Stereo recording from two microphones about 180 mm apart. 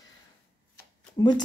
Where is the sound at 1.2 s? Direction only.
20° left (ahead or behind).